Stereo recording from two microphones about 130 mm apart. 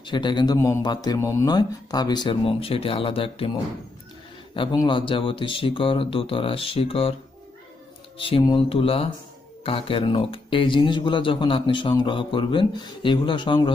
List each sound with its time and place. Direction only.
0.0 s speech: 35° left (ahead or behind)
8.2 s speech: 45° left (ahead or behind)